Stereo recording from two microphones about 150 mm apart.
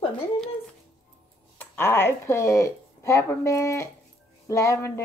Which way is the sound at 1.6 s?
15° left (ahead or behind).